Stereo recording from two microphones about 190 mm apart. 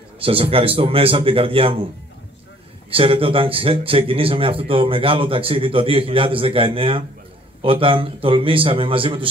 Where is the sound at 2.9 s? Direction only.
30° right (ahead or behind).